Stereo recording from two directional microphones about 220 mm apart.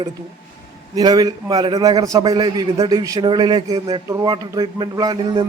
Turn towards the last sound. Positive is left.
turn(degrees=-20)  # may be behind; listen again after turning